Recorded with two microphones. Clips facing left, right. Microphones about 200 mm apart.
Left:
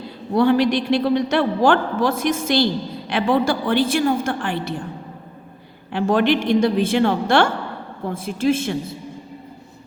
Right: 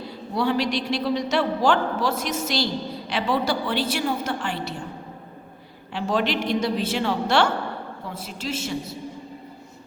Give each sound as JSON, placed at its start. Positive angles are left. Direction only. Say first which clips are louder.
{"t": 0.3, "sound": "a man's voice", "louder": "left 7 dB", "side_deg": 55}
{"t": 5.9, "sound": "a man's voice", "louder": "left 7 dB", "side_deg": 55}